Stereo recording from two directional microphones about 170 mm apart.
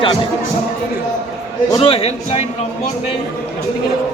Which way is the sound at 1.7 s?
35° left (ahead or behind).